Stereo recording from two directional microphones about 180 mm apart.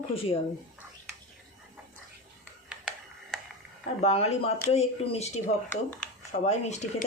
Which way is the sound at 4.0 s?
35° left (ahead or behind).